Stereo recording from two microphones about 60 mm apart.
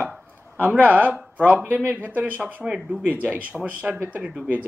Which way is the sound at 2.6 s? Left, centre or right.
Centre.